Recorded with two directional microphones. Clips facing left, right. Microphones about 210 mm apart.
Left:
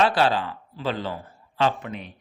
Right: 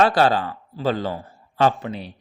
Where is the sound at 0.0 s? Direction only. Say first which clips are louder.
Right 3 dB; 45° right (ahead or behind).